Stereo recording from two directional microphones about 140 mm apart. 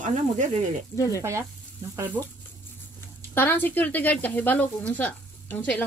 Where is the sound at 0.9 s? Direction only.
20° left (ahead or behind).